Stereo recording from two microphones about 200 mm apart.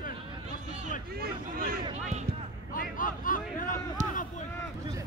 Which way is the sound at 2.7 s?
45° left (ahead or behind).